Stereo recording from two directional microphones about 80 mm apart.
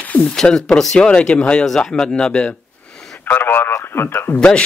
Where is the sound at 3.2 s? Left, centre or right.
Left.